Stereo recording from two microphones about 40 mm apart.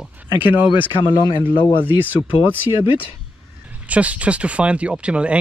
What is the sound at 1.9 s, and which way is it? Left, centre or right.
Speech, right.